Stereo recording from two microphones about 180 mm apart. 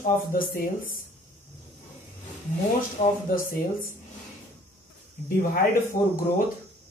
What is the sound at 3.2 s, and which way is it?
Speech, 55° left (ahead or behind).